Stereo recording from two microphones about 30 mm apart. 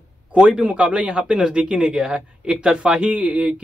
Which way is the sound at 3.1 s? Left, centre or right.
Right.